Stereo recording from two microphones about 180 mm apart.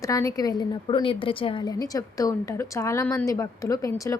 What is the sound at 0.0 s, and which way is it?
A woman's voice, 20° left (ahead or behind).